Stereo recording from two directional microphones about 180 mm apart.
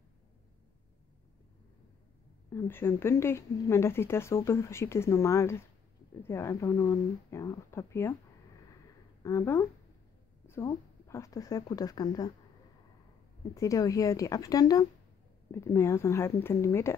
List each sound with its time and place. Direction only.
2.5 s a woman's voice: 15° left (ahead or behind)
9.2 s a woman's voice: 15° left (ahead or behind)
13.6 s a woman's voice: 20° left (ahead or behind)